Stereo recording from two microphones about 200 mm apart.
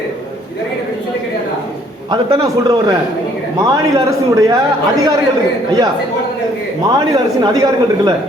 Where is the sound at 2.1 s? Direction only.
20° right (ahead or behind).